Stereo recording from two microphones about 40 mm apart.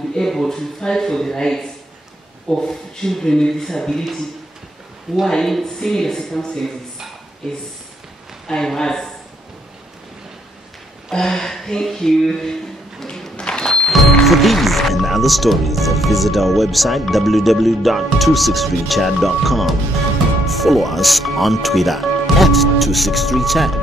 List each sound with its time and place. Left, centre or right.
0.1 s speech: centre
5.3 s speech: centre
8.5 s speech: centre
11.1 s speech: centre
13.0 s a sound: centre
13.7 s speech: centre